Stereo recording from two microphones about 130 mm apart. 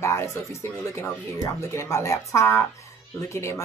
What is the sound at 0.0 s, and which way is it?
A woman's voice, 20° left (ahead or behind).